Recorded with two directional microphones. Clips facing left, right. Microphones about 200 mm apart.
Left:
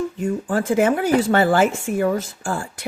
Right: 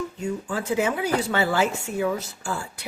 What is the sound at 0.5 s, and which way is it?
Speech, 50° left (ahead or behind).